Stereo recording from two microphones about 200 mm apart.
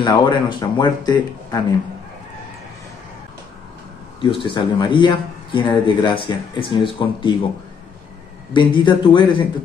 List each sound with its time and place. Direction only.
0.0 s speech: 20° left (ahead or behind)
4.2 s speech: 25° left (ahead or behind)
8.5 s speech: 25° left (ahead or behind)